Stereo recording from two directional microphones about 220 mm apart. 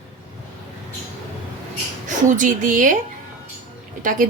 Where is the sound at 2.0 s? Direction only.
35° right (ahead or behind).